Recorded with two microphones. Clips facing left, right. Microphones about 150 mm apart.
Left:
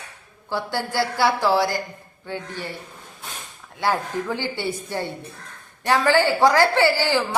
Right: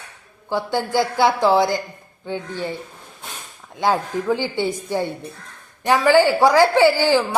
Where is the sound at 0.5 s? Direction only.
15° right (ahead or behind).